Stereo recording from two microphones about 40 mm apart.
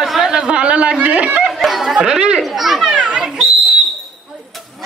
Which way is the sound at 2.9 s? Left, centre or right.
Right.